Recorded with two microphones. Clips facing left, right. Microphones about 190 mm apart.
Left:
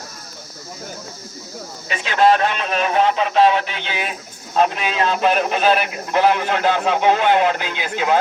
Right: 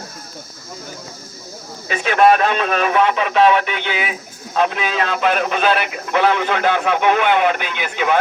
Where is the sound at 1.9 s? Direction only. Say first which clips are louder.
Right 2 dB; 60° right (ahead or behind).